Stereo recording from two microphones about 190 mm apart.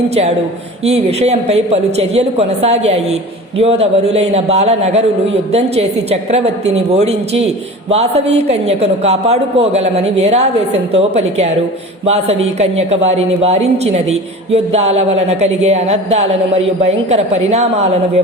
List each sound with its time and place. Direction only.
0.9 s speech: 35° right (ahead or behind)